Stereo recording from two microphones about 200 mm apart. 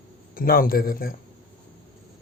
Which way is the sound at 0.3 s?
45° left (ahead or behind).